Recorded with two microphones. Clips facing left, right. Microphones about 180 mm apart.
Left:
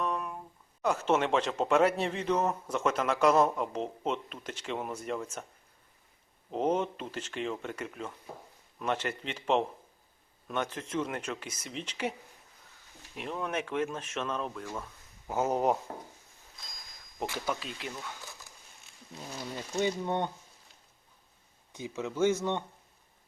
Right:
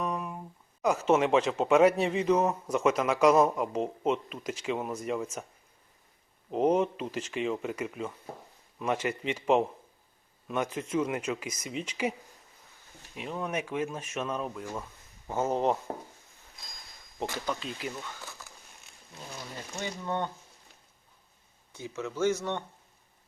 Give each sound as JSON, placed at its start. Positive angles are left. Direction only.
{"t": 0.0, "sound": "speech", "side_deg": -10}
{"t": 6.5, "sound": "speech", "side_deg": -5}
{"t": 13.1, "sound": "speech", "side_deg": 0}
{"t": 15.3, "sound": "speech", "side_deg": 5}
{"t": 17.4, "sound": "speech", "side_deg": 5}
{"t": 19.8, "sound": "speech", "side_deg": 15}
{"t": 21.7, "sound": "speech", "side_deg": 15}